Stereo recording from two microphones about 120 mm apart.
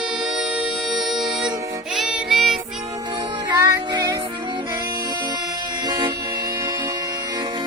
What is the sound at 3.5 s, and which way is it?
Music, 30° right (ahead or behind).